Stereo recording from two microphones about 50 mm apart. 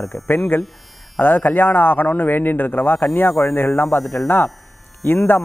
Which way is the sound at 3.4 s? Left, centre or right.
Left.